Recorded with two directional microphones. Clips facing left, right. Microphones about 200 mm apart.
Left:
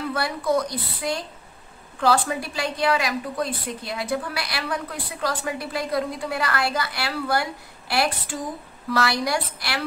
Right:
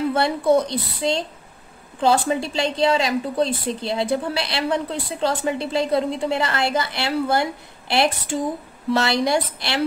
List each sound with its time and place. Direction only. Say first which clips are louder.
0.1 s a woman's voice: right 4 dB; 25° right (ahead or behind)